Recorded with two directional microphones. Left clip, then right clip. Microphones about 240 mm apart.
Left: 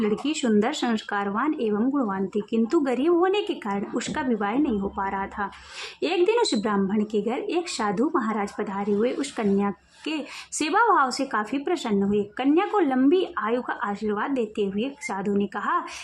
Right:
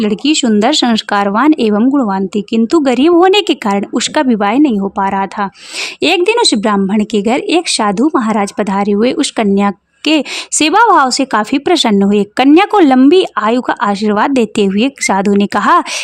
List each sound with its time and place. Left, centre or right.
0.0 s a woman's voice: right